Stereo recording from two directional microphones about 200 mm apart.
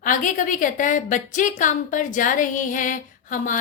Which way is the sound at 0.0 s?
40° left (ahead or behind).